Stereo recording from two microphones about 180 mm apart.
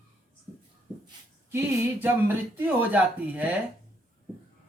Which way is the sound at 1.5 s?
10° right (ahead or behind).